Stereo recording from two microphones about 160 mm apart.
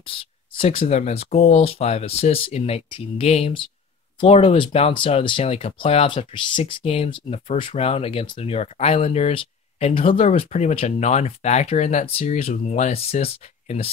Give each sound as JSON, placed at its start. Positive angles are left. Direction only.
{"t": 0.0, "sound": "speech", "side_deg": 35}